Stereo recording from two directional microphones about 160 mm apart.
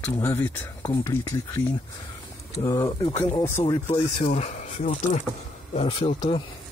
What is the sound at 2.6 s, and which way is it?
Speech, 25° left (ahead or behind).